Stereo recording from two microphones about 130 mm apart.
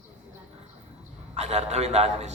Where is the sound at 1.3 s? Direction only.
55° right (ahead or behind).